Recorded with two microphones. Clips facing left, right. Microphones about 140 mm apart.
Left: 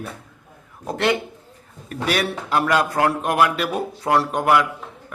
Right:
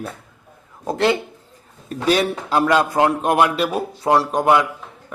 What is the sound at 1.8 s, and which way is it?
A man's voice, 25° right (ahead or behind).